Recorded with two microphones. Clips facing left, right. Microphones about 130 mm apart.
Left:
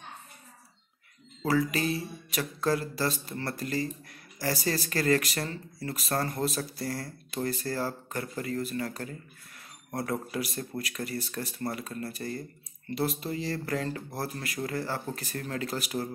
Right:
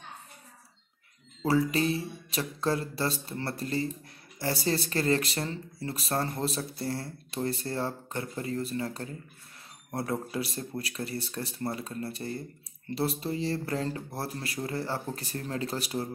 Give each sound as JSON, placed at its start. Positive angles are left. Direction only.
{"t": 1.4, "sound": "speech", "side_deg": -30}
{"t": 10.3, "sound": "speech", "side_deg": -30}